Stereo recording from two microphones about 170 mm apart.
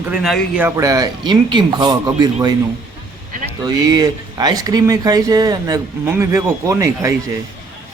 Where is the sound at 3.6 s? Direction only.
25° right (ahead or behind).